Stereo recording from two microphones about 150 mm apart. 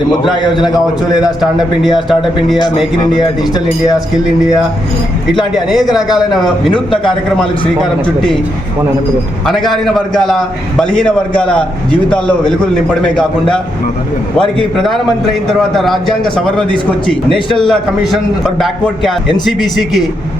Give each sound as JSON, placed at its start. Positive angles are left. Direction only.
{"t": 0.4, "sound": "speech", "side_deg": 30}
{"t": 1.2, "sound": "a man's voice", "side_deg": 0}
{"t": 3.2, "sound": "speech", "side_deg": 25}
{"t": 5.5, "sound": "a man's voice", "side_deg": 0}
{"t": 9.8, "sound": "a man's voice", "side_deg": 0}
{"t": 12.1, "sound": "a man's voice", "side_deg": 5}